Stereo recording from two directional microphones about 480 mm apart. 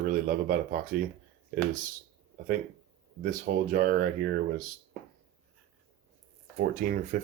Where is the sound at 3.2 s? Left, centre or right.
Centre.